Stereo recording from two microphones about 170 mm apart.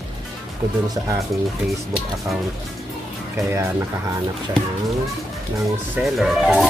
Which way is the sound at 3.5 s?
15° right (ahead or behind).